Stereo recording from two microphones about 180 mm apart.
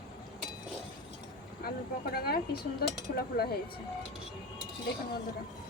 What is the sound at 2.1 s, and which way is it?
Speech, 60° left (ahead or behind).